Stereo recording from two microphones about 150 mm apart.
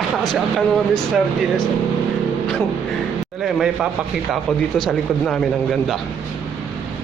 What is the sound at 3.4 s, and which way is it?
A man's voice, centre (ahead or behind).